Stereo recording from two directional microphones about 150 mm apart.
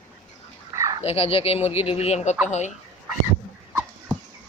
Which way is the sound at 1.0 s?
40° left (ahead or behind).